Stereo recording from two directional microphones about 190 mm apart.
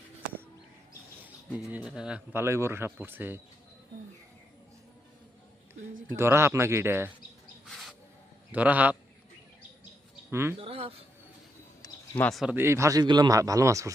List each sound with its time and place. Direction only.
1.5 s speech: 5° right (ahead or behind)
6.1 s speech: 15° right (ahead or behind)
7.6 s bird: centre (ahead or behind)
8.5 s speech: 10° right (ahead or behind)
10.6 s speech: 30° right (ahead or behind)
11.8 s a sound: 10° left (ahead or behind)
12.3 s speech: 5° right (ahead or behind)